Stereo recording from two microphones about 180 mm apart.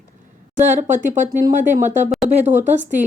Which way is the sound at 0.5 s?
45° right (ahead or behind).